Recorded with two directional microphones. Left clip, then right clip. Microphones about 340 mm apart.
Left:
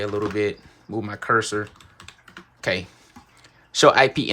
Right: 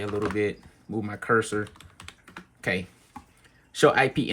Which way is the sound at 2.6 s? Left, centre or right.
Centre.